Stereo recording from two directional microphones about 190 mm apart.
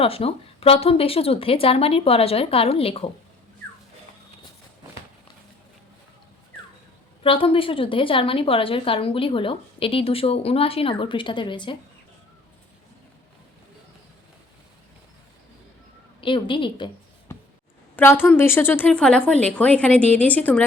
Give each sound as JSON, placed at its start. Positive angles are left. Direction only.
{"t": 0.0, "sound": "a woman's voice", "side_deg": 30}
{"t": 7.2, "sound": "a woman's voice", "side_deg": 30}
{"t": 16.2, "sound": "a woman's voice", "side_deg": 25}
{"t": 17.9, "sound": "a woman's voice", "side_deg": 10}